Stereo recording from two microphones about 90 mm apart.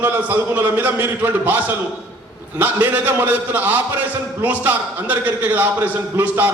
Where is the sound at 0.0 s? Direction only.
20° right (ahead or behind).